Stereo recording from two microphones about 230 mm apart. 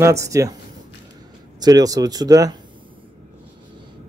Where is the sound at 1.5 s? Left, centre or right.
Centre.